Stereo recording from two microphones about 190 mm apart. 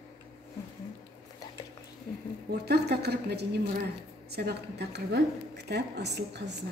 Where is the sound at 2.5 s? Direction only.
55° right (ahead or behind).